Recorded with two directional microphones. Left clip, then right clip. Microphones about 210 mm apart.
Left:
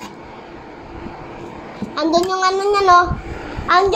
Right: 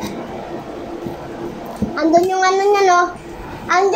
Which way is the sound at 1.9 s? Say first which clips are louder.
Right 3 dB; 15° left (ahead or behind).